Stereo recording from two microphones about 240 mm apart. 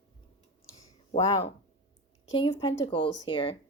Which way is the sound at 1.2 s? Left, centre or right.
Centre.